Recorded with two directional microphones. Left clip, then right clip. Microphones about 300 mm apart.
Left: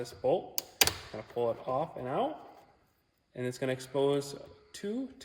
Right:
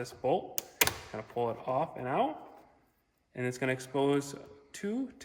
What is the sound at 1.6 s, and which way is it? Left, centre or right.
Speech, centre.